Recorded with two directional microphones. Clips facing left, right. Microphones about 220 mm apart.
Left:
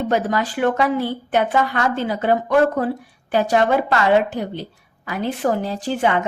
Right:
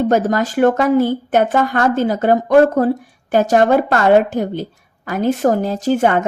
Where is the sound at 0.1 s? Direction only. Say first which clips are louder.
Right 5 dB; 45° right (ahead or behind).